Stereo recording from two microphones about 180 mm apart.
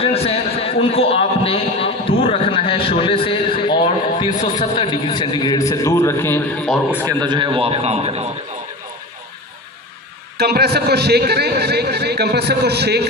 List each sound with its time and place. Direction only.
0.0 s a sound: 35° left (ahead or behind)
4.7 s a man's voice: 30° left (ahead or behind); by 6.8 s 10° left (ahead or behind)
7.1 s a man's voice: 25° right (ahead or behind)
10.3 s a man's voice: 65° right (ahead or behind)